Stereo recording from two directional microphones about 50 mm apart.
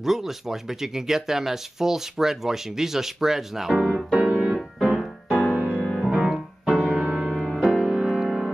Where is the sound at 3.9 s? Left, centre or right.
Right.